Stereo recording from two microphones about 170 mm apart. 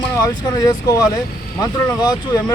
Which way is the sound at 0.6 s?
25° left (ahead or behind).